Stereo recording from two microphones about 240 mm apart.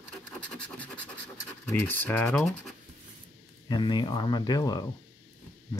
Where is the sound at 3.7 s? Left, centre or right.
Centre.